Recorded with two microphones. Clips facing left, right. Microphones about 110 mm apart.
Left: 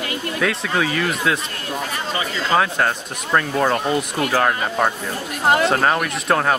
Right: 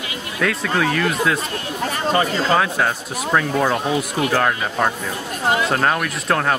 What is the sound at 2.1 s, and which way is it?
Speech, 45° right (ahead or behind).